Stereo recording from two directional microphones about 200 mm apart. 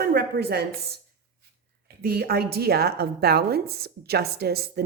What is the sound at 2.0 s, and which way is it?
A woman's voice, 50° right (ahead or behind).